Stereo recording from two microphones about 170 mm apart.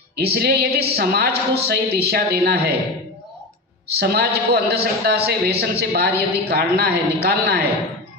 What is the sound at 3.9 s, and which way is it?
A man's voice, 65° right (ahead or behind).